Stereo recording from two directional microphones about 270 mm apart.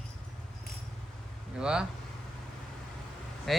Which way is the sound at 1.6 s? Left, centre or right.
Centre.